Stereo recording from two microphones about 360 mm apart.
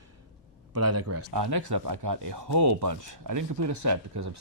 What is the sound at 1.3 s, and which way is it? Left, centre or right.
Speech, right.